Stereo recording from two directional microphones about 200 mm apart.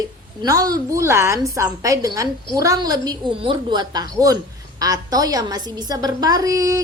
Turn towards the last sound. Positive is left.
turn(degrees=-15)  # may be behind; listen again after turning